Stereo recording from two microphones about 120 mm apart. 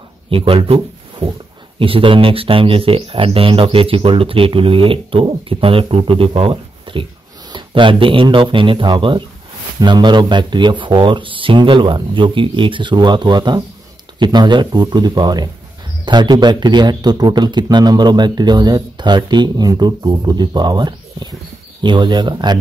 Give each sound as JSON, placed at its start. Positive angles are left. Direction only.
{"t": 0.3, "sound": "a man's voice", "side_deg": -50}